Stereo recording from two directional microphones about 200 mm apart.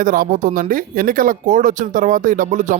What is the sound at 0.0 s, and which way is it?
Speech, 45° right (ahead or behind).